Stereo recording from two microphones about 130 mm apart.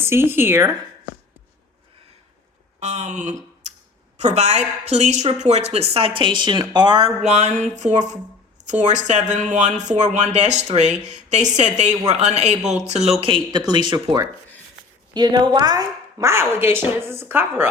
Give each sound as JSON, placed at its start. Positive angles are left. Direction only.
{"t": 0.0, "sound": "a woman's voice", "side_deg": -20}
{"t": 2.8, "sound": "speech", "side_deg": -65}
{"t": 7.9, "sound": "a woman's voice", "side_deg": -65}